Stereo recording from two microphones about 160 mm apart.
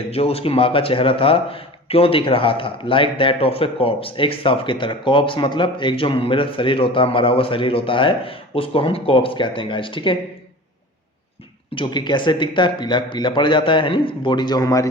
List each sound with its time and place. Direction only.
0.1 s a man's voice: 40° left (ahead or behind)
11.7 s speech: 30° left (ahead or behind)